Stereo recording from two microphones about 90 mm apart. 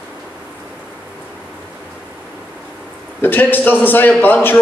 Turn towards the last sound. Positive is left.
turn(degrees=20)  # may be behind; listen again after turning